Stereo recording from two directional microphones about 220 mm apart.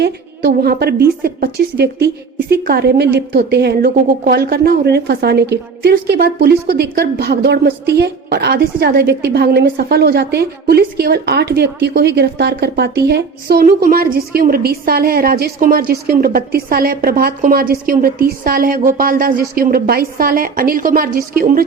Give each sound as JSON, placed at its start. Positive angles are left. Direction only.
{"t": 0.0, "sound": "a woman's voice", "side_deg": -45}